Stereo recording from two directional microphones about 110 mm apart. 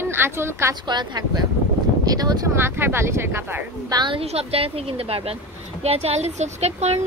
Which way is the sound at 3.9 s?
40° right (ahead or behind).